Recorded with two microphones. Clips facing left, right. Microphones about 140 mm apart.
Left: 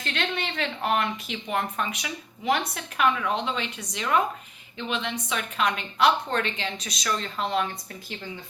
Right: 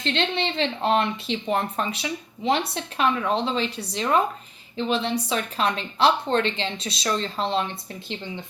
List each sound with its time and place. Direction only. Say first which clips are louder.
0.0 s a woman's voice: right 5 dB; 25° right (ahead or behind)